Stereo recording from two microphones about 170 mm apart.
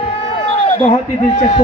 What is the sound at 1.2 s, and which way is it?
Speech, 45° left (ahead or behind).